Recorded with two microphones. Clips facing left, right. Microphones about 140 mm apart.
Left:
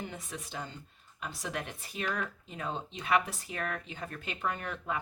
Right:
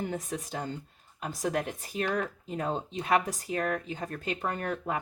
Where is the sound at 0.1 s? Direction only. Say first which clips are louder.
Right 7 dB; 45° right (ahead or behind).